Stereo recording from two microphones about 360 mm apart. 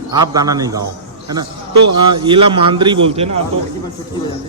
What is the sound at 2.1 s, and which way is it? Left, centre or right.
A man's voice, centre.